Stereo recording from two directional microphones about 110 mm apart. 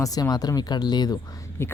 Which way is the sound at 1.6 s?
20° left (ahead or behind).